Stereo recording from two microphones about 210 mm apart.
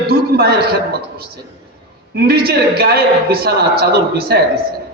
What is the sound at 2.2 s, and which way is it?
A man's voice, 50° right (ahead or behind).